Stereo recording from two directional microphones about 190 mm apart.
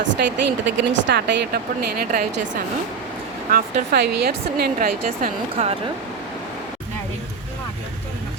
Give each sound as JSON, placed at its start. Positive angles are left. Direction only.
{"t": 0.1, "sound": "speech", "side_deg": -70}
{"t": 3.5, "sound": "speech", "side_deg": -55}
{"t": 5.6, "sound": "speech", "side_deg": -35}